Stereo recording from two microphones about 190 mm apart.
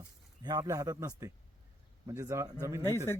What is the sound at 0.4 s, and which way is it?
A man's voice, 20° right (ahead or behind).